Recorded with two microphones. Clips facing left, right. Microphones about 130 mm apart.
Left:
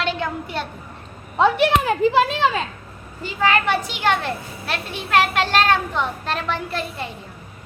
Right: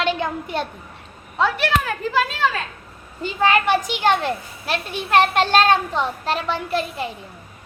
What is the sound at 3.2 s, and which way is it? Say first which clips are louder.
A child's voice: right 1 dB; 20° right (ahead or behind).